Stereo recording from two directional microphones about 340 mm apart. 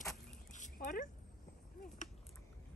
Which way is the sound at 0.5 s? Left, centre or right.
Left.